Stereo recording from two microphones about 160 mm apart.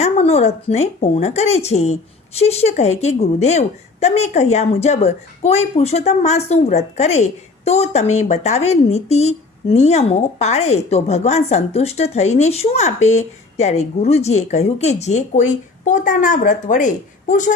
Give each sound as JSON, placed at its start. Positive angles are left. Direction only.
{"t": 0.0, "sound": "speech", "side_deg": 40}